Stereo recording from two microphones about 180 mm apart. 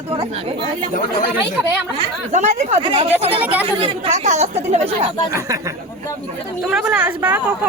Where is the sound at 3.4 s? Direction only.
10° right (ahead or behind).